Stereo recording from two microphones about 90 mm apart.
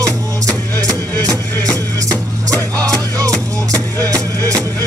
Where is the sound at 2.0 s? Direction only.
40° right (ahead or behind).